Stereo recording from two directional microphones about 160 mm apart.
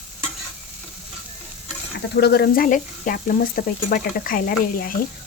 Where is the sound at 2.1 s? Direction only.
90° left.